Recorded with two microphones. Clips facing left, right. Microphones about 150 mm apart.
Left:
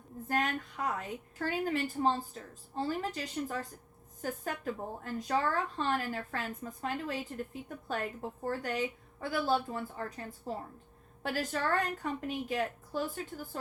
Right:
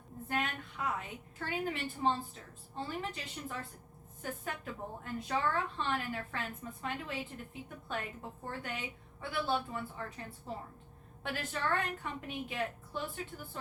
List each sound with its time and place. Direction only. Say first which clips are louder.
0.3 s a woman's voice: left 4 dB; 40° left (ahead or behind)